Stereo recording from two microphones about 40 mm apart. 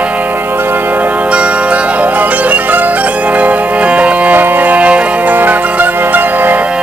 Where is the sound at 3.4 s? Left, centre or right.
Right.